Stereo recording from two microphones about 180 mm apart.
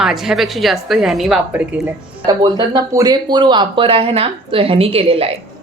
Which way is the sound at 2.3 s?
25° right (ahead or behind).